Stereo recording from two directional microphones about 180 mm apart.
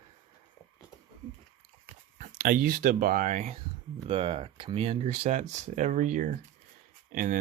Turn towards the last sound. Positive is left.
turn(degrees=-50)  # may be behind; listen again after turning